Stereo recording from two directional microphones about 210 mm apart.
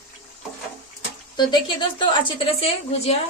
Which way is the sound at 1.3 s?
20° left (ahead or behind).